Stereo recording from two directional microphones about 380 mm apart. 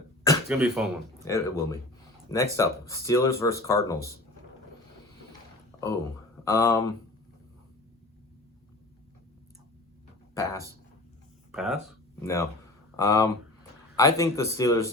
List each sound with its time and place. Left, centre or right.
0.4 s speech: centre
6.4 s speech: centre
10.3 s speech: centre